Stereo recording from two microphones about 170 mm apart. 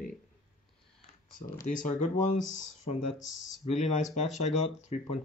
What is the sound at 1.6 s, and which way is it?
Speech, 50° left (ahead or behind).